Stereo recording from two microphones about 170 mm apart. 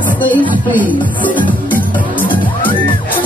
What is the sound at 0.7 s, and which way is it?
Music, 10° left (ahead or behind).